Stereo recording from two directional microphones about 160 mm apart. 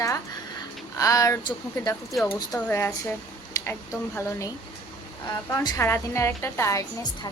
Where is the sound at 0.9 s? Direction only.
20° left (ahead or behind).